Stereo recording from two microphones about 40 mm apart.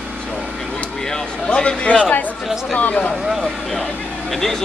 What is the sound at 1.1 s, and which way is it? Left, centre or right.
Speech, left.